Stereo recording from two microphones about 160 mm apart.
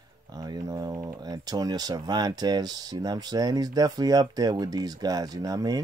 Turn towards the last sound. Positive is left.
turn(degrees=-20)  # may be behind; listen again after turning